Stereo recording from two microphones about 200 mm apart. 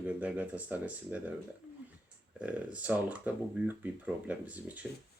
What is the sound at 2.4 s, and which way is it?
Speech, 5° right (ahead or behind).